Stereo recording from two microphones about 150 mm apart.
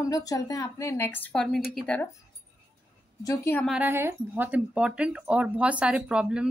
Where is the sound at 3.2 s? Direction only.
20° left (ahead or behind).